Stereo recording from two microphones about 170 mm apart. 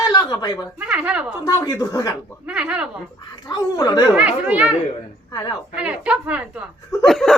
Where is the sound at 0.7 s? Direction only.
10° right (ahead or behind).